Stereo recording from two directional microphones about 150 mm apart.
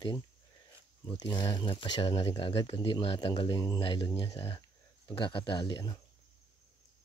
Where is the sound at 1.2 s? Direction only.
30° left (ahead or behind).